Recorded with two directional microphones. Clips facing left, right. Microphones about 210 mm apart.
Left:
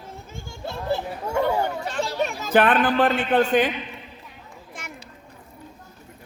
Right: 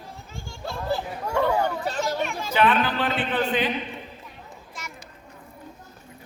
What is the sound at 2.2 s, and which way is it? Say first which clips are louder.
A man's voice: left 4 dB; 50° left (ahead or behind).